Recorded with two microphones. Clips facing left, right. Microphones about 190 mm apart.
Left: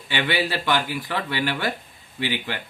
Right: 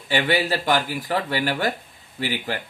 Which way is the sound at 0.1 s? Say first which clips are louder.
Right 3 dB; 40° right (ahead or behind).